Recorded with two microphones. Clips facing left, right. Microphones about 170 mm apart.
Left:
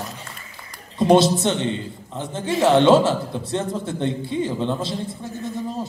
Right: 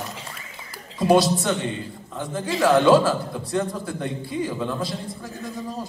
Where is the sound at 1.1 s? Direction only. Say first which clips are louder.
Left 2 dB; 25° left (ahead or behind).